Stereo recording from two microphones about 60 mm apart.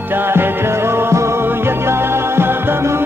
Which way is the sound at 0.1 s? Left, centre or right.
Right.